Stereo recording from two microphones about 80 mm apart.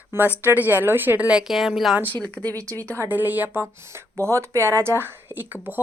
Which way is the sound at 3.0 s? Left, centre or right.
Right.